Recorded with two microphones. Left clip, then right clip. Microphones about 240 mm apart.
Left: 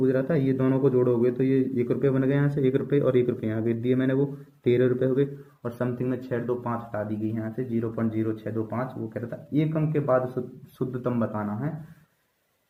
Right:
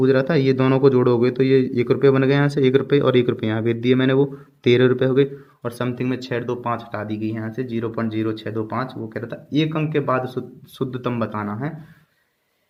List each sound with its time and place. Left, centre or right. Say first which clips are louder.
0.0 s speech: right 7 dB; right